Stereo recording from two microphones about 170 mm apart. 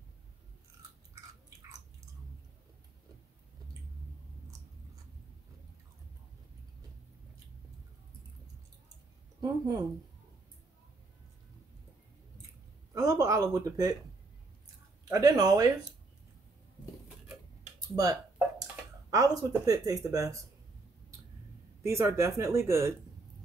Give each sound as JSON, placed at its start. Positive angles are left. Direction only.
{"t": 9.4, "sound": "speech", "side_deg": -20}
{"t": 12.9, "sound": "a sound", "side_deg": -20}
{"t": 15.0, "sound": "speech", "side_deg": -20}
{"t": 17.7, "sound": "typing", "side_deg": -20}
{"t": 19.0, "sound": "speech", "side_deg": -20}
{"t": 21.8, "sound": "speech", "side_deg": -15}